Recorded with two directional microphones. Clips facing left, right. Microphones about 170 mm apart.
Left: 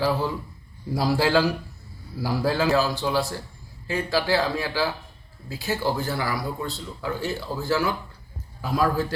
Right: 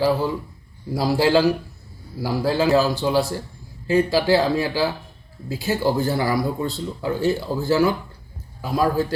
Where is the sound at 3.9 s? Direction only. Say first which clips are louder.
Right 6 dB; 35° right (ahead or behind).